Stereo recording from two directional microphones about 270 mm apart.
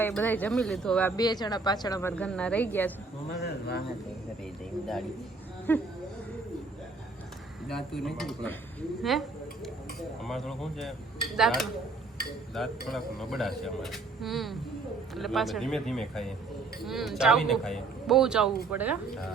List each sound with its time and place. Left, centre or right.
0.0 s a woman's voice: centre
3.4 s speech: left
5.7 s a man's voice: centre
7.7 s a man's voice: centre
10.2 s a man's voice: centre
12.9 s a man's voice: centre